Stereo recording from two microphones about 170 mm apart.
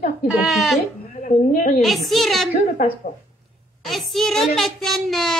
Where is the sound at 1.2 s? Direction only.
50° left (ahead or behind).